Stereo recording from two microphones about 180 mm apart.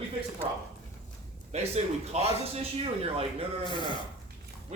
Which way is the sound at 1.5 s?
35° right (ahead or behind).